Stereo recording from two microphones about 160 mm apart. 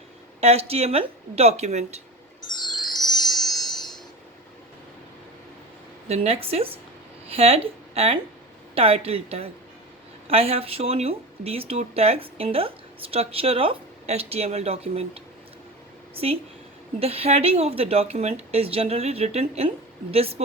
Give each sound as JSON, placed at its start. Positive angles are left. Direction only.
{"t": 0.3, "sound": "speech", "side_deg": -40}
{"t": 2.5, "sound": "music", "side_deg": 25}
{"t": 3.2, "sound": "chime", "side_deg": 25}
{"t": 3.7, "sound": "a sound", "side_deg": 25}
{"t": 6.1, "sound": "speech", "side_deg": -40}